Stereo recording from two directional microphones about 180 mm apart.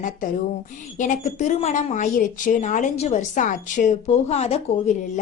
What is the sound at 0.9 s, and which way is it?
A woman's voice, 45° left (ahead or behind).